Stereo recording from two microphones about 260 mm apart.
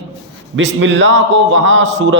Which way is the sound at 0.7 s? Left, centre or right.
Right.